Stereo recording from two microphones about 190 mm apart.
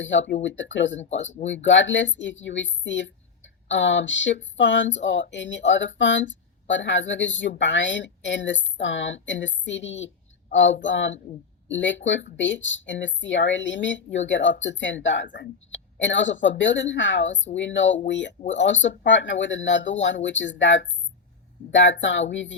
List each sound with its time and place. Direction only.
0.0 s speech: 75° left (ahead or behind)